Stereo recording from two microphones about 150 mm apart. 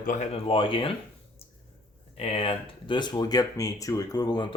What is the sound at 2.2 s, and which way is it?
Speech, 40° left (ahead or behind).